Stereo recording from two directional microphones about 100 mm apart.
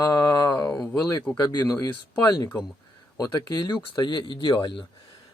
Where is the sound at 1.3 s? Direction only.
40° left (ahead or behind).